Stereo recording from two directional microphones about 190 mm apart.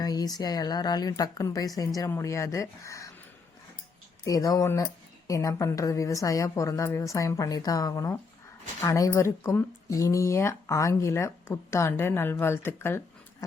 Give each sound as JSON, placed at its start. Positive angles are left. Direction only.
{"t": 0.0, "sound": "a woman's voice", "side_deg": 20}
{"t": 4.2, "sound": "a woman's voice", "side_deg": 20}